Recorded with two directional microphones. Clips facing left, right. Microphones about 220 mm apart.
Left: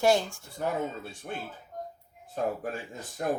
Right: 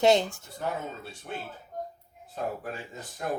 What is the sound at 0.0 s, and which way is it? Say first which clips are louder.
Speech: right 2 dB; 20° right (ahead or behind).